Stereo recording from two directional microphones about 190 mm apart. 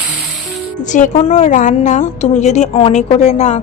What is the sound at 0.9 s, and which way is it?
A woman's voice, 40° left (ahead or behind).